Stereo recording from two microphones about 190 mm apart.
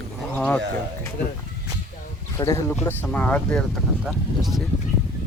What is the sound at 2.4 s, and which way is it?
Speech, 15° left (ahead or behind).